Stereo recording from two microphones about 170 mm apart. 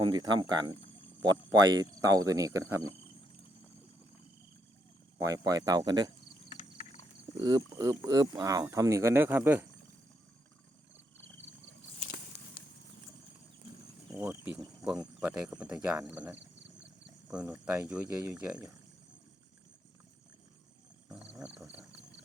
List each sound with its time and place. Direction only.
0.0 s speech: 25° right (ahead or behind)
5.2 s speech: 20° right (ahead or behind)
6.5 s horse: 35° left (ahead or behind)
7.3 s speech: 25° right (ahead or behind)
14.1 s speech: 15° right (ahead or behind)
21.1 s a sound: 5° right (ahead or behind)